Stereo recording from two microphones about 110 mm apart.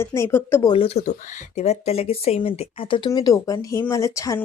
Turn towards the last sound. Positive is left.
turn(degrees=25)  # may be behind; listen again after turning